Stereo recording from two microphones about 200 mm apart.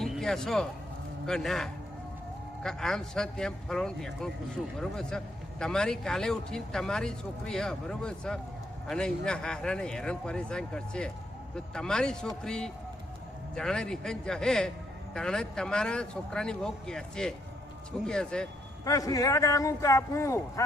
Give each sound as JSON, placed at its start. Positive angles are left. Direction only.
{"t": 0.0, "sound": "a man's voice", "side_deg": 0}
{"t": 18.9, "sound": "a man's voice", "side_deg": 15}